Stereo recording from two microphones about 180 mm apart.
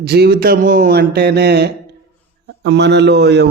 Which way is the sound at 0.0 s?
65° right (ahead or behind).